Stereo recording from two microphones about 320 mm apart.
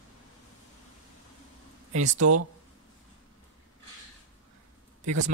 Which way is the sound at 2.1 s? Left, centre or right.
Right.